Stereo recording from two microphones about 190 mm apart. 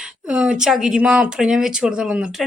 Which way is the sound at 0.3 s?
5° right (ahead or behind).